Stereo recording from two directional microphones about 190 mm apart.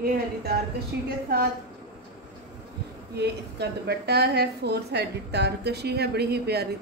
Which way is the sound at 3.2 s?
60° right (ahead or behind).